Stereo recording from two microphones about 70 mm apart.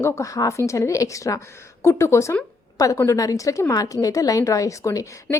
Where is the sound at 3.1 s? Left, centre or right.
Left.